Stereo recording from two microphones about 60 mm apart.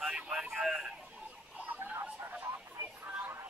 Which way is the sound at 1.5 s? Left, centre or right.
Right.